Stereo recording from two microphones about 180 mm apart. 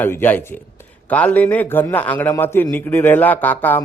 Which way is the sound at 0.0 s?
10° left (ahead or behind).